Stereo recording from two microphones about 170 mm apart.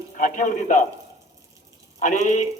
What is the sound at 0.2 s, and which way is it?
Speech, 45° left (ahead or behind).